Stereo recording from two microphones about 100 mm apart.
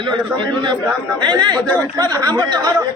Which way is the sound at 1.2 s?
50° right (ahead or behind).